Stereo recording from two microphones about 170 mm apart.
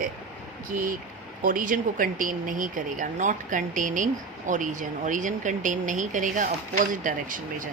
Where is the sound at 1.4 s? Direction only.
50° right (ahead or behind).